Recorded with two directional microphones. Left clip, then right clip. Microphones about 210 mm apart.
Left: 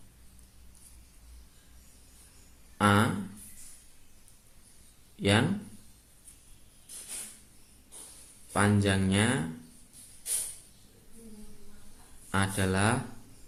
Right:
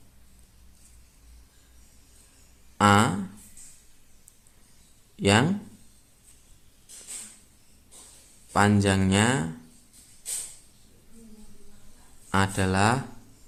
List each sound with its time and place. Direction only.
2.7 s a sound: 25° right (ahead or behind)
5.2 s speech: 25° right (ahead or behind)
8.5 s speech: 25° right (ahead or behind)
12.3 s speech: 25° right (ahead or behind)